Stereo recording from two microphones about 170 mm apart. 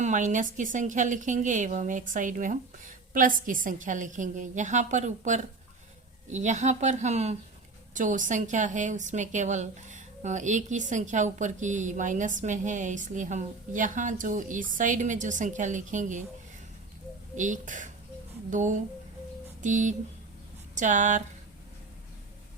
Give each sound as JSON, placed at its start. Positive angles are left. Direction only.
{"t": 0.0, "sound": "a woman's voice", "side_deg": -45}
{"t": 17.3, "sound": "a woman's voice", "side_deg": -45}